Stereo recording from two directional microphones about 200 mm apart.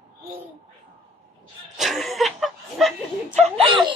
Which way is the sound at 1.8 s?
Centre (ahead or behind).